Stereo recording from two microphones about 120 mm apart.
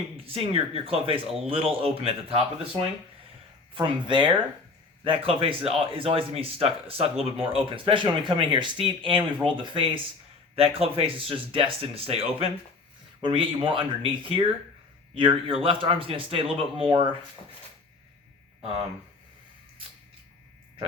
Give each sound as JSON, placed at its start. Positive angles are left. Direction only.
{"t": 0.3, "sound": "speech", "side_deg": -50}
{"t": 3.8, "sound": "speech", "side_deg": -45}
{"t": 13.2, "sound": "speech", "side_deg": -45}